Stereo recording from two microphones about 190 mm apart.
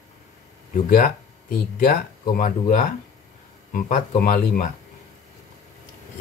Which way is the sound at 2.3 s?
40° left (ahead or behind).